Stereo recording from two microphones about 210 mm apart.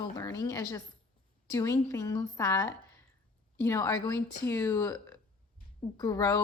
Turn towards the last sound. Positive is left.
turn(degrees=15)  # may be behind; listen again after turning